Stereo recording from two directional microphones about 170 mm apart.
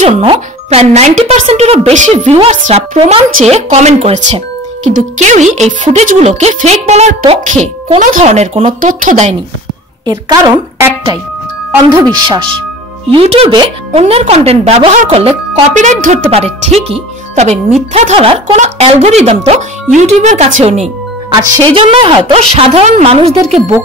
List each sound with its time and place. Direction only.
0.0 s speech: 35° right (ahead or behind)
3.0 s speech: 35° right (ahead or behind)
10.0 s a woman's voice: 25° right (ahead or behind); by 20.8 s 40° right (ahead or behind)
21.7 s speech: 30° right (ahead or behind)